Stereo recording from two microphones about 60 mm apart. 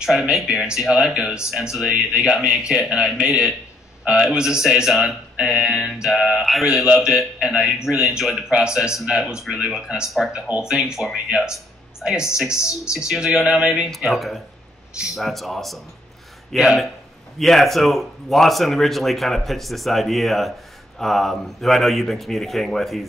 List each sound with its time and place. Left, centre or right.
0.0 s a man's voice: centre
6.6 s a man's voice: centre
13.8 s speech: centre